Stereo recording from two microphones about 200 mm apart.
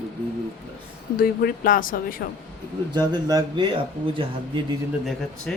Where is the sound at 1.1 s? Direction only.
45° left (ahead or behind).